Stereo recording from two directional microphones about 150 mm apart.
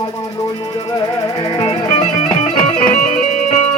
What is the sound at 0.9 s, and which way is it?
Music, 35° left (ahead or behind).